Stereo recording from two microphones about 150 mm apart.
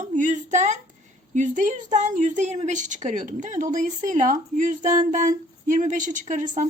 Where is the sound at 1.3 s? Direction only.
55° right (ahead or behind).